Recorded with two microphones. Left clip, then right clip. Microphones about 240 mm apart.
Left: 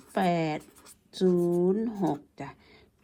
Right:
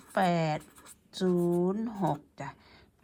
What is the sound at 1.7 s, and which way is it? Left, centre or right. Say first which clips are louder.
Speech: left 6 dB; right.